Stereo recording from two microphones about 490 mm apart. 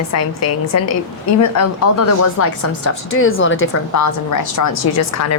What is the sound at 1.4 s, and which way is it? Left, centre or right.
Speech, left.